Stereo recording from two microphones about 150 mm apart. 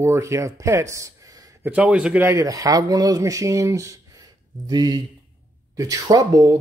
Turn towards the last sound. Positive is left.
turn(degrees=-25)  # may be behind; listen again after turning